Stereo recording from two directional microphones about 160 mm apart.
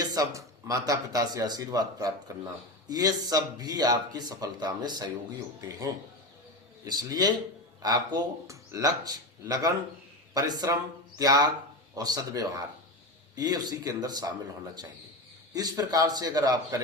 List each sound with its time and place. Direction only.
0.0 s speech: 25° right (ahead or behind)
15.5 s speech: 25° right (ahead or behind)